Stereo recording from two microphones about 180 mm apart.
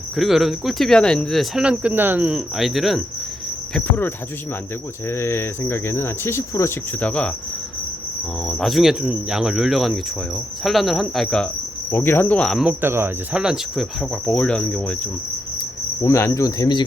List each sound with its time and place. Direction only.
0.2 s cricket: centre (ahead or behind)
3.8 s speech: 10° left (ahead or behind)
8.4 s cricket: centre (ahead or behind)
11.9 s speech: 10° left (ahead or behind)
12.8 s cricket: 10° right (ahead or behind); by 14.9 s 5° left (ahead or behind)
16.0 s speech: 15° left (ahead or behind)